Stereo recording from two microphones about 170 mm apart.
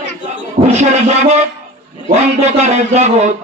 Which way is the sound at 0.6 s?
40° right (ahead or behind).